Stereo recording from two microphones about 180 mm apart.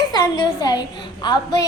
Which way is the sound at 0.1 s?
20° left (ahead or behind).